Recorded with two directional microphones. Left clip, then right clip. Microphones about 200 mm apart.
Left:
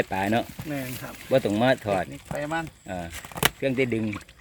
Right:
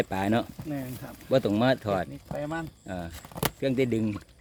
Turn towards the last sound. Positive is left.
turn(degrees=-10)  # may be behind; listen again after turning